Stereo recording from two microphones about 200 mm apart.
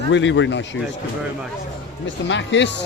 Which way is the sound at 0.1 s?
65° left (ahead or behind).